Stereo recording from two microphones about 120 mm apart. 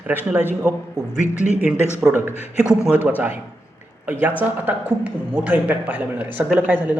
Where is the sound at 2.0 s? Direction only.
20° right (ahead or behind).